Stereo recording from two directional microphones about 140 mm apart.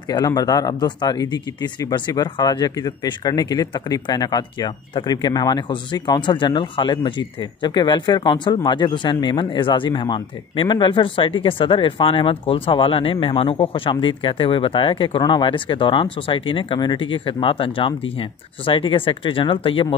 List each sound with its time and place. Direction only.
0.1 s speech: 25° left (ahead or behind)